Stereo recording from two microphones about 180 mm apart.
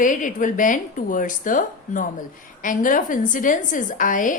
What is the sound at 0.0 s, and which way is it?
A woman's voice, 45° left (ahead or behind).